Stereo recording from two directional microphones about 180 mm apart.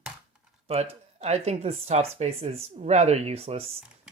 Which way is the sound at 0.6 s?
35° right (ahead or behind).